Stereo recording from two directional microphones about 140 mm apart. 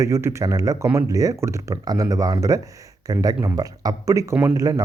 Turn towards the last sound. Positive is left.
turn(degrees=-25)  # may be behind; listen again after turning